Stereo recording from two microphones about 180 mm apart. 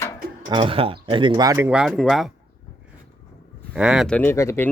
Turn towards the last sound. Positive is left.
turn(degrees=15)  # may be behind; listen again after turning